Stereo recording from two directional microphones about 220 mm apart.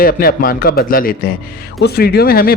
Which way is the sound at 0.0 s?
40° left (ahead or behind).